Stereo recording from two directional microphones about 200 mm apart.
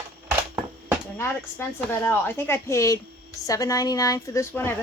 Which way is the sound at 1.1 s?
10° left (ahead or behind).